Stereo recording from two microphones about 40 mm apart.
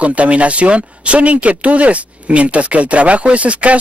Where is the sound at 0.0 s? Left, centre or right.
Right.